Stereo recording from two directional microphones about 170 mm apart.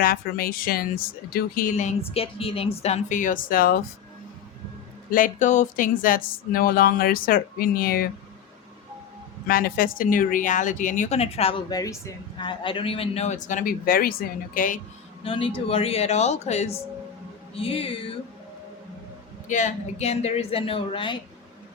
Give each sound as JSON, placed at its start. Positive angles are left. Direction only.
{"t": 0.0, "sound": "speech", "side_deg": 60}
{"t": 5.1, "sound": "speech", "side_deg": 50}
{"t": 9.5, "sound": "speech", "side_deg": 60}
{"t": 11.7, "sound": "speech", "side_deg": 20}
{"t": 15.2, "sound": "a woman's voice", "side_deg": 35}
{"t": 17.5, "sound": "music", "side_deg": 35}
{"t": 19.5, "sound": "a woman's voice", "side_deg": 45}